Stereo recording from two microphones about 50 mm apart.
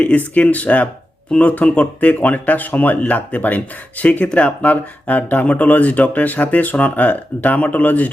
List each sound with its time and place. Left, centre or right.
0.3 s speech: left